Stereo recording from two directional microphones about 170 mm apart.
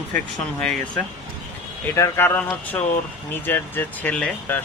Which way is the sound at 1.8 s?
15° left (ahead or behind).